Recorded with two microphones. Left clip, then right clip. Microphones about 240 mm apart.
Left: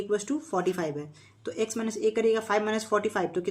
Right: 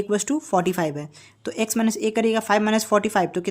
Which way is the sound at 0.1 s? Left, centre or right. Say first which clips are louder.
Right 6 dB; right.